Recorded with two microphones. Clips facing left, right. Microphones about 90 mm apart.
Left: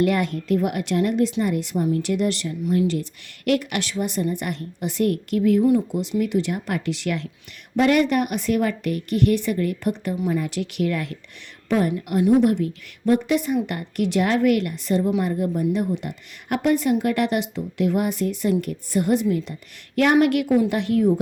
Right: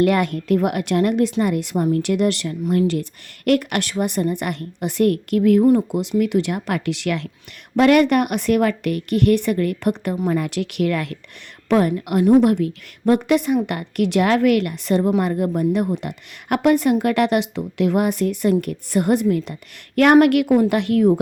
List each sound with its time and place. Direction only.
0.0 s a woman's voice: 60° right (ahead or behind)
12.2 s speech: 50° right (ahead or behind)
12.5 s a woman's voice: 70° right (ahead or behind)